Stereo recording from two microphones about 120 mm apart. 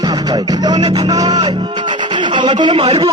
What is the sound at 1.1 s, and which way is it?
Speech, 30° right (ahead or behind).